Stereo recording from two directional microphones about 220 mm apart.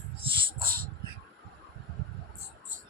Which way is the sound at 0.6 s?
45° right (ahead or behind).